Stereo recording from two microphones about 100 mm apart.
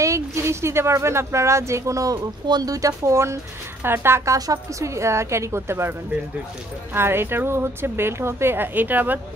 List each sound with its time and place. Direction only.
0.0 s a woman's voice: 30° right (ahead or behind)